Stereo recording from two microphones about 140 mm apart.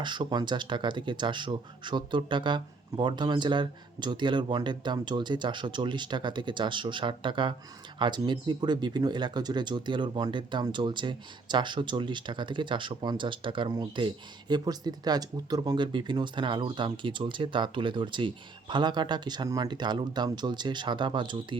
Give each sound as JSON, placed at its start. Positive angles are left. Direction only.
{"t": 0.0, "sound": "speech", "side_deg": -35}